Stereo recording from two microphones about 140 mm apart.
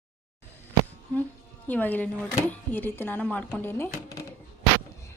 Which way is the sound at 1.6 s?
10° left (ahead or behind).